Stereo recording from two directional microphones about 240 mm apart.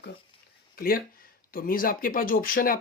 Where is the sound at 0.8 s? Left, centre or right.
Left.